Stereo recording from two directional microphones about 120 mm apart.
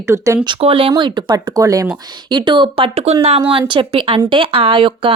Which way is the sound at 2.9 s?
60° right (ahead or behind).